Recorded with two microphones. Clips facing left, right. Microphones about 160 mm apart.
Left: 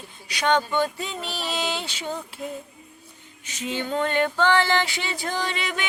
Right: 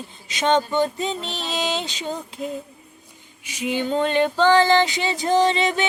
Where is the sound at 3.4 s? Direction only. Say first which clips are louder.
Right 5 dB; 10° right (ahead or behind).